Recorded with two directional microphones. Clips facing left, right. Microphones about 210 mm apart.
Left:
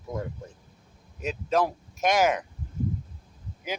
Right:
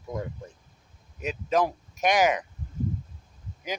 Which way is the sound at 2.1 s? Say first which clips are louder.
Even; 15° right (ahead or behind).